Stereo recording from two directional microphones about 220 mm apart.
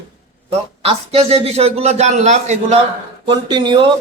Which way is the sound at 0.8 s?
30° right (ahead or behind).